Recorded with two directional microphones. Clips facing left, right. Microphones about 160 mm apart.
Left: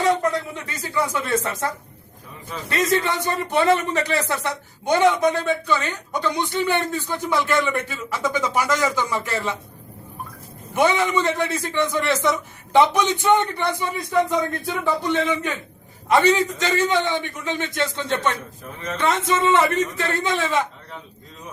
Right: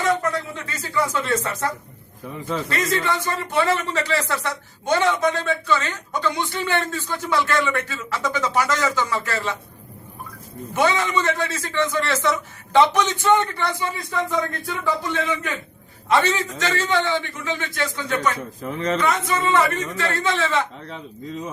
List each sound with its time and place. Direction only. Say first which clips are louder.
0.2 s a sound: left 2 dB; 15° left (ahead or behind)
2.6 s speech: left 5 dB; 20° left (ahead or behind)
10.8 s speech: left 1 dB; 15° left (ahead or behind)
14.8 s a man's voice: left 2 dB; 20° left (ahead or behind)
18.6 s speech: right 12 dB; 90° right
18.9 s speech: left 5 dB; 25° left (ahead or behind)